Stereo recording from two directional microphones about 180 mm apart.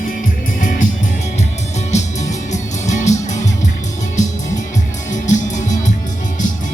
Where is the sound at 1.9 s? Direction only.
40° left (ahead or behind).